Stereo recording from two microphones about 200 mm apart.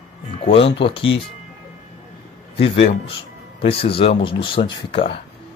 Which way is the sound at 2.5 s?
30° left (ahead or behind).